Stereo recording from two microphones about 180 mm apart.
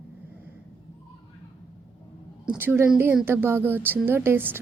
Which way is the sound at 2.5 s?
10° right (ahead or behind).